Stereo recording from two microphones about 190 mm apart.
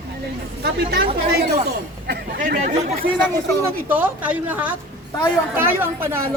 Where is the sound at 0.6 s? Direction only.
55° right (ahead or behind).